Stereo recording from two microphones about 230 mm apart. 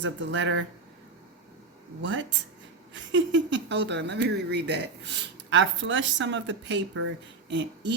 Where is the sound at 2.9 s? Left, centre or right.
Right.